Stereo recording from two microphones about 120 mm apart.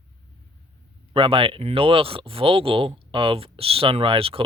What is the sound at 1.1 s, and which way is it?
Speech, 50° right (ahead or behind).